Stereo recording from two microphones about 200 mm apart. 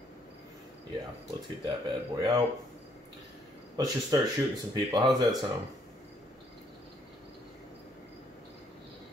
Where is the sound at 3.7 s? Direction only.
20° right (ahead or behind).